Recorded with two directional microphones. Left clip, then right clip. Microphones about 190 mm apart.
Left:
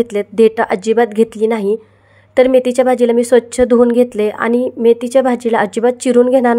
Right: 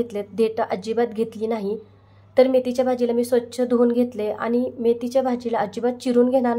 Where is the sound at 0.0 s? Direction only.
45° left (ahead or behind).